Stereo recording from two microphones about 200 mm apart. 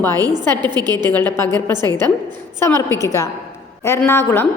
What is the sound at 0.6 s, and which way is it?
Speech, 20° right (ahead or behind).